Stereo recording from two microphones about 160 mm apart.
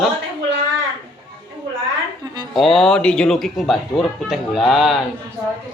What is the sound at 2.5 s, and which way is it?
Speech, centre (ahead or behind).